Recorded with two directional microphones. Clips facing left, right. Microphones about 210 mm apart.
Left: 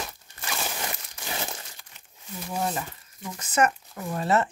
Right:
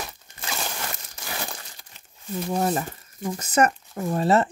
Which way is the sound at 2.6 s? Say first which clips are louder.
Right 2 dB; 45° right (ahead or behind).